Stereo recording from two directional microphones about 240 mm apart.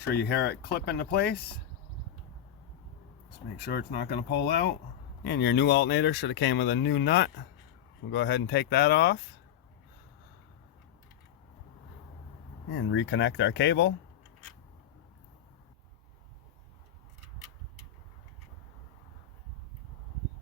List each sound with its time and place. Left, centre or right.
0.0 s speech: left
3.7 s speech: left
12.9 s speech: left